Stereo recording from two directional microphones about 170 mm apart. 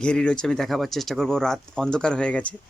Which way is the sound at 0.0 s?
5° left (ahead or behind).